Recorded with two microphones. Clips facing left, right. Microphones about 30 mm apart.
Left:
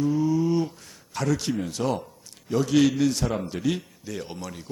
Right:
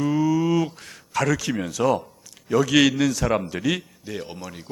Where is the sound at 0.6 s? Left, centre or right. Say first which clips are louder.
Right 3 dB; right.